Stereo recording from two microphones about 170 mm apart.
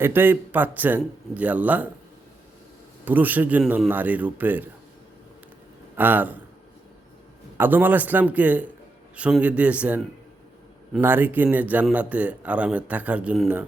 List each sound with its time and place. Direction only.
0.0 s speech: 10° right (ahead or behind)
3.0 s speech: 10° right (ahead or behind)
6.0 s speech: 10° right (ahead or behind)
7.5 s speech: 10° right (ahead or behind)